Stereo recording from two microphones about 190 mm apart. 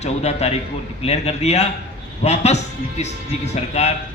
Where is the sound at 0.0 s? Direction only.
35° left (ahead or behind).